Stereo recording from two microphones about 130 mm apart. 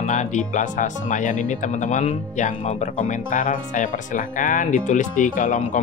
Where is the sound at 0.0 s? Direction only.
70° left (ahead or behind).